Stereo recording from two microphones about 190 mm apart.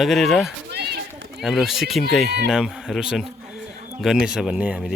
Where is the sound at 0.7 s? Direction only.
60° right (ahead or behind).